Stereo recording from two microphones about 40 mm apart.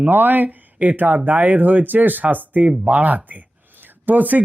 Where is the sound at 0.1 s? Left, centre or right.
Right.